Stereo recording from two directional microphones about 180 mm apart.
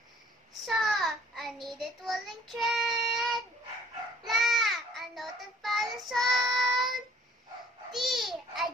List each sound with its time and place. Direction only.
0.7 s child singing: centre (ahead or behind)
7.9 s babbling: centre (ahead or behind)